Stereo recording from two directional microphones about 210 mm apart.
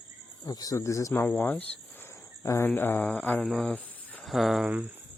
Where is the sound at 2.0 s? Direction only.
15° left (ahead or behind).